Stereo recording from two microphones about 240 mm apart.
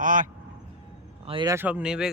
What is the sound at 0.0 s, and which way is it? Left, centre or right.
Speech, right.